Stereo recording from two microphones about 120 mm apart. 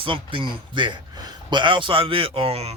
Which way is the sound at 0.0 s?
45° right (ahead or behind).